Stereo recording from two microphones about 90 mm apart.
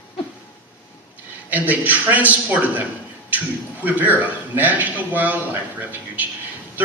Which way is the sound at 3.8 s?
20° right (ahead or behind).